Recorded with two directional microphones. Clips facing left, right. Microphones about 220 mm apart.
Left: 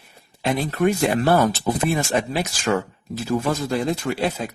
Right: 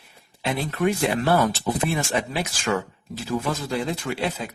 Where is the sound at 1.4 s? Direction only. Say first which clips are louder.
Left 3 dB; 40° left (ahead or behind).